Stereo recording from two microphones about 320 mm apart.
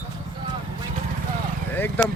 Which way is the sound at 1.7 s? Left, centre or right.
Centre.